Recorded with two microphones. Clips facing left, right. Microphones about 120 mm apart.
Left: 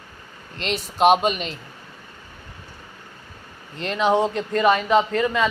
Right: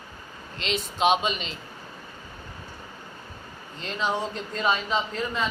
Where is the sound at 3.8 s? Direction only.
70° left (ahead or behind).